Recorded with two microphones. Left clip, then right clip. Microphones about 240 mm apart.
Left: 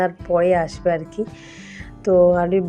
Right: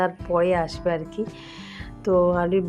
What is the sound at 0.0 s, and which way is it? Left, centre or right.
Speech, centre.